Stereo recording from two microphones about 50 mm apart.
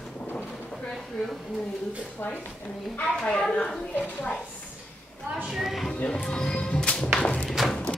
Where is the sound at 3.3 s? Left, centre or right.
Centre.